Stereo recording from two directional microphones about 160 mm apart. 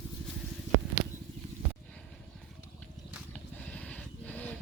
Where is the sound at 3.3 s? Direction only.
10° left (ahead or behind).